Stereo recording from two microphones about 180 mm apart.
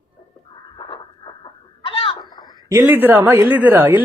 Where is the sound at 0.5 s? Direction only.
25° left (ahead or behind).